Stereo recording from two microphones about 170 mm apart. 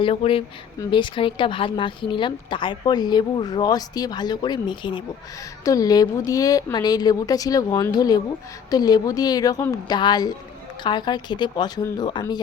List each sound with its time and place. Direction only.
0.0 s speech: 35° left (ahead or behind)